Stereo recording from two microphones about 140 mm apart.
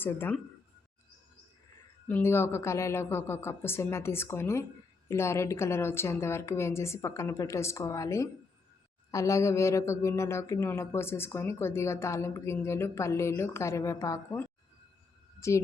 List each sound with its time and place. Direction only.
0.0 s a woman's voice: 15° left (ahead or behind)
2.0 s a woman's voice: 15° left (ahead or behind)